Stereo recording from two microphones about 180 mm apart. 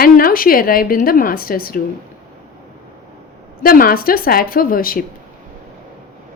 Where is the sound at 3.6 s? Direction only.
55° left (ahead or behind).